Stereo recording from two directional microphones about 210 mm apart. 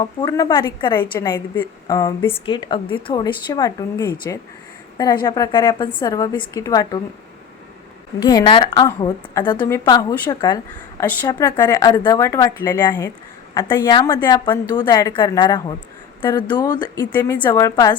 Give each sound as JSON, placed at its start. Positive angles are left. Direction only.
{"t": 0.0, "sound": "a woman's voice", "side_deg": 20}
{"t": 8.2, "sound": "a woman's voice", "side_deg": 20}